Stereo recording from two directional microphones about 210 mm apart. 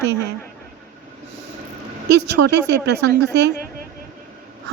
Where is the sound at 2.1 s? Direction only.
55° right (ahead or behind).